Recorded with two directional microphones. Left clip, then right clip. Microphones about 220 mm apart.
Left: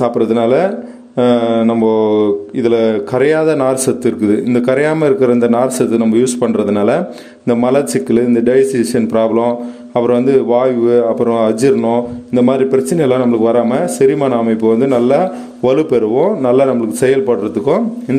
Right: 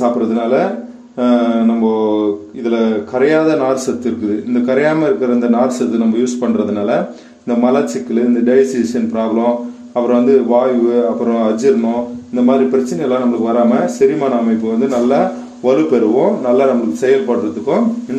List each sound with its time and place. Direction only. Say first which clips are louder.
0.0 s speech: left 3 dB; 45° left (ahead or behind)
1.1 s mantra: left 2 dB; 45° left (ahead or behind)
14.8 s speech: left 2 dB; 40° left (ahead or behind)